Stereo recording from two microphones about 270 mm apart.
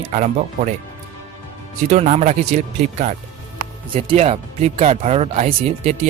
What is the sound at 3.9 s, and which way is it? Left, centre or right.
Speech, right.